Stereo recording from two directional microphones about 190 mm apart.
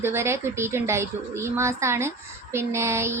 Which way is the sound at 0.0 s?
15° right (ahead or behind).